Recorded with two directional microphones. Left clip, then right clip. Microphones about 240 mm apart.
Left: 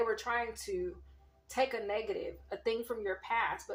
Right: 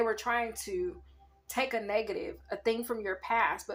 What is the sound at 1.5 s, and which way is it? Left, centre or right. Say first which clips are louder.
Speech: right 2 dB; right.